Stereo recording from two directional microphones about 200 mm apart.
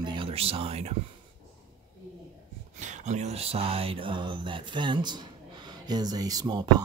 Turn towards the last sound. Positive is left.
turn(degrees=-20)  # may be behind; listen again after turning